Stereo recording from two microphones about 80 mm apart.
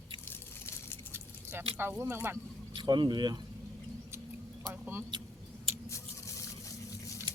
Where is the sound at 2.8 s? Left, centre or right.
Right.